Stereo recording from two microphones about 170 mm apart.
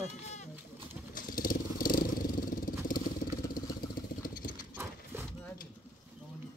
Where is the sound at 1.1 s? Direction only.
55° left (ahead or behind).